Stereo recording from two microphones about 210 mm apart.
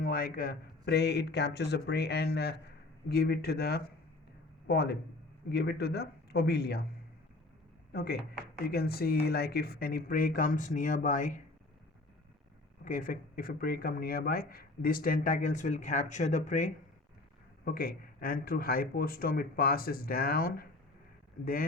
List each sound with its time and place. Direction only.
0.0 s speech: 45° left (ahead or behind)
7.9 s speech: 45° left (ahead or behind)
12.8 s speech: 40° left (ahead or behind)